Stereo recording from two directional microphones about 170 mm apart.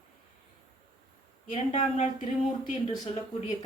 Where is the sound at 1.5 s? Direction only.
40° left (ahead or behind).